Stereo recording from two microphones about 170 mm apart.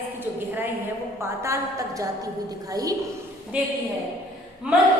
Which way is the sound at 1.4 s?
15° right (ahead or behind).